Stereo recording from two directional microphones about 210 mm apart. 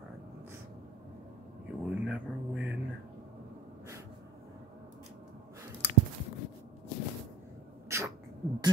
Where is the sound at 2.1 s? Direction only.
5° right (ahead or behind).